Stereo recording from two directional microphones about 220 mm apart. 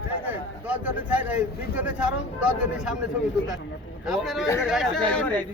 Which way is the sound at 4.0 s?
Centre (ahead or behind).